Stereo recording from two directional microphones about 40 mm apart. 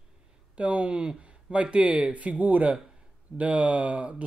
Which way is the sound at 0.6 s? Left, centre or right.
Right.